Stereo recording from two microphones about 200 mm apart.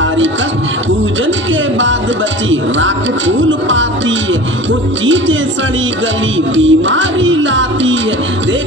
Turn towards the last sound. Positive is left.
turn(degrees=-70)  # may be behind; listen again after turning